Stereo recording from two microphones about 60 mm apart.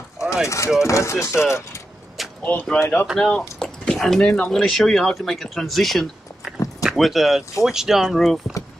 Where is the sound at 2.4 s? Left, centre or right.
Left.